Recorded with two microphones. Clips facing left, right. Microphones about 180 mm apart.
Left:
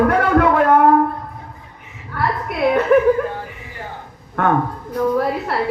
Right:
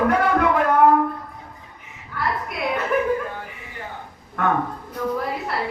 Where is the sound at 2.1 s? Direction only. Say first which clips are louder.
Left 5 dB; 60° left (ahead or behind).